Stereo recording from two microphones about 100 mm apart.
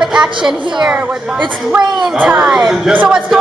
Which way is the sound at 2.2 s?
10° right (ahead or behind).